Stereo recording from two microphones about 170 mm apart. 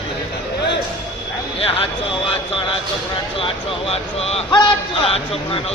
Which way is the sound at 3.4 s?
35° left (ahead or behind).